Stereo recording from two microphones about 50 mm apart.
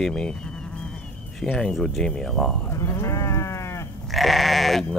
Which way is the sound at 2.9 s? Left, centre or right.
Left.